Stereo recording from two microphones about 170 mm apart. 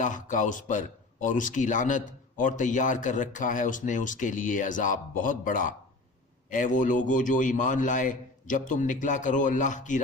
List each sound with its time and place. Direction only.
0.0 s speech: 50° left (ahead or behind)